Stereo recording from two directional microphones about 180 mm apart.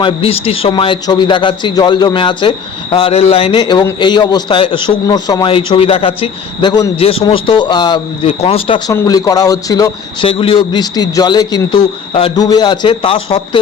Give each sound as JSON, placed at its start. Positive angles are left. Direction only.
{"t": 0.0, "sound": "a man's voice", "side_deg": 30}
{"t": 8.9, "sound": "a man's voice", "side_deg": 20}